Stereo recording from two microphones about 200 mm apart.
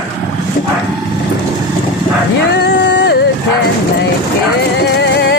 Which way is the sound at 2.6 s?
60° left (ahead or behind).